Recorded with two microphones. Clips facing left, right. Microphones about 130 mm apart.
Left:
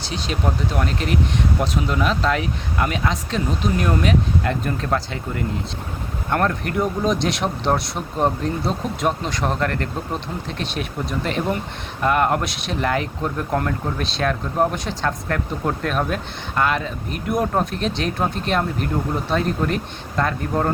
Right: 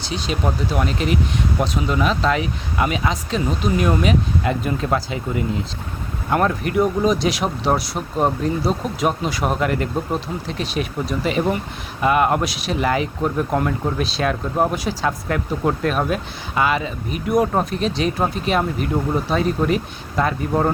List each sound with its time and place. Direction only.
0.0 s speech: centre (ahead or behind)